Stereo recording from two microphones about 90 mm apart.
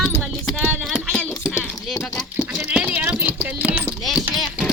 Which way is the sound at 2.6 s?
15° right (ahead or behind).